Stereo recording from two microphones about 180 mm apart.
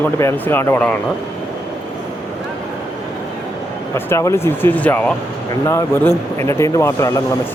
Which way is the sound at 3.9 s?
15° left (ahead or behind).